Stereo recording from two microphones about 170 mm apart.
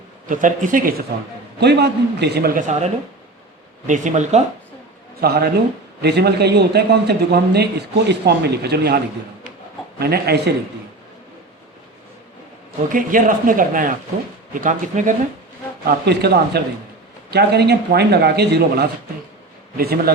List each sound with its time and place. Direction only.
0.3 s speech: 50° right (ahead or behind)
1.5 s speech: 80° right; by 4.4 s 45° right (ahead or behind)
5.2 s a man's voice: 65° right (ahead or behind)
10.0 s speech: 70° right (ahead or behind)
12.9 s speech: 55° right (ahead or behind)
15.9 s a man's voice: 70° right (ahead or behind)